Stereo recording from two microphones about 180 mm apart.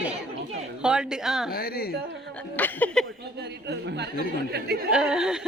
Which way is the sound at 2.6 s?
10° left (ahead or behind).